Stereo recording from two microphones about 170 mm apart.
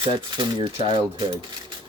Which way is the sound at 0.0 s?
30° right (ahead or behind).